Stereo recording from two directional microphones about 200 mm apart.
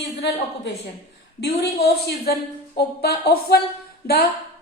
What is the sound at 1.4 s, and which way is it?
A woman's voice, 55° left (ahead or behind).